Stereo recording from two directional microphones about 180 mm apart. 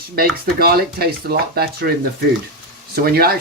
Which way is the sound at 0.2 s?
60° right (ahead or behind).